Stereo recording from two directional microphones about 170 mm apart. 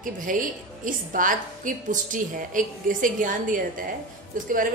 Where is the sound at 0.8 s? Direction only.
50° right (ahead or behind).